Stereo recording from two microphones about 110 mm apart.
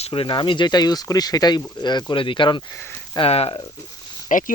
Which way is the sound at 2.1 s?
50° left (ahead or behind).